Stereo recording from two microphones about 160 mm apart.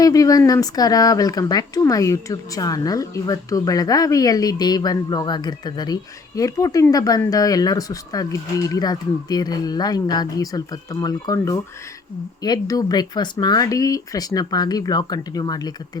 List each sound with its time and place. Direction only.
0.0 s speech: 20° left (ahead or behind)